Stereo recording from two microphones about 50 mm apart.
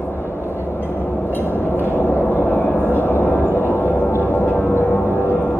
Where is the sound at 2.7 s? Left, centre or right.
Left.